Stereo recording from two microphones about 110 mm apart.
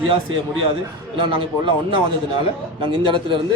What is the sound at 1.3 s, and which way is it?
A man's voice, 50° right (ahead or behind).